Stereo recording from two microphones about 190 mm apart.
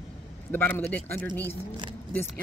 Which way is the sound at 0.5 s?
10° left (ahead or behind).